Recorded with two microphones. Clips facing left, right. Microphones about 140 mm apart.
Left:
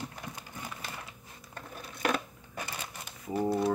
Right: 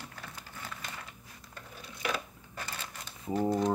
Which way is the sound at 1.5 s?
50° left (ahead or behind).